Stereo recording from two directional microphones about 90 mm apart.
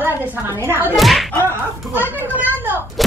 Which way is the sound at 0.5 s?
30° left (ahead or behind).